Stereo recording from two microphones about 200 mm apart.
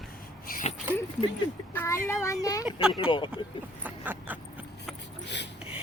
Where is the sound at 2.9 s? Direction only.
25° left (ahead or behind).